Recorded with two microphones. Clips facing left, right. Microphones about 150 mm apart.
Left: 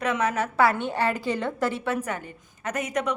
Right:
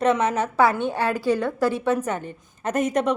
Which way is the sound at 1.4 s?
10° right (ahead or behind).